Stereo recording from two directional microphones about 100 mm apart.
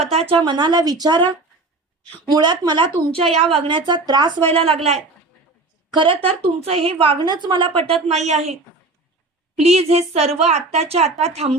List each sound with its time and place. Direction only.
0.0 s speech: 90° right; by 4.4 s 45° right (ahead or behind)
4.5 s a woman's voice: 70° right (ahead or behind); by 5.0 s 90° right
5.9 s speech: 55° right (ahead or behind)
6.2 s a woman's voice: 75° right (ahead or behind); by 7.7 s 50° right (ahead or behind)
7.8 s a woman's voice: 75° right (ahead or behind)
9.6 s a woman's voice: 90° right